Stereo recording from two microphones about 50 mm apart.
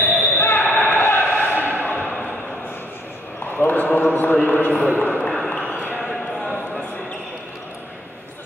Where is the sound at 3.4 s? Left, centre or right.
Left.